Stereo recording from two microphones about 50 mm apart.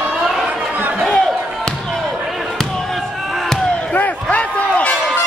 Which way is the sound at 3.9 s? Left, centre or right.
Left.